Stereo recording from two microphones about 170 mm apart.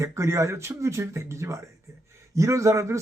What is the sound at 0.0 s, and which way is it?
A man's voice, 15° right (ahead or behind).